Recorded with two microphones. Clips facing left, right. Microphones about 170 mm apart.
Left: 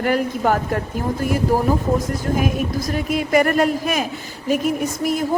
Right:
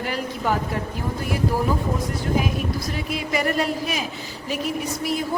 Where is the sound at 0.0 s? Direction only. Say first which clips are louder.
Left 7 dB; 50° left (ahead or behind).